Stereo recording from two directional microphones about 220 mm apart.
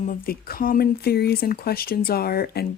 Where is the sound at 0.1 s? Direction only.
40° left (ahead or behind).